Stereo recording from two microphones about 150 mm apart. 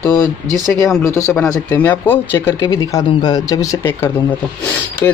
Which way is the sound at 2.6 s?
25° left (ahead or behind).